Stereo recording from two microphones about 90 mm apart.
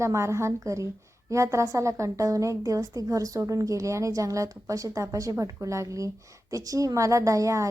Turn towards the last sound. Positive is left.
turn(degrees=-35)  # may be behind; listen again after turning